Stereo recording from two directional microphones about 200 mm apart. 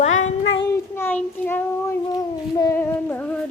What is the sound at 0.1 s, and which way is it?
Child singing, 90° left.